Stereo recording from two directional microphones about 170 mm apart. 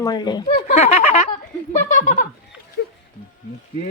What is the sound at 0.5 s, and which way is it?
Speech, 45° left (ahead or behind).